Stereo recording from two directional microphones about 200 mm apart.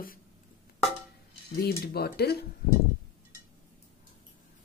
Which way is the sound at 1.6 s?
50° left (ahead or behind).